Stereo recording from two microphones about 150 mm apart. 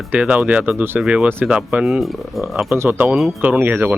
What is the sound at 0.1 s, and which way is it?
Speech, 10° right (ahead or behind).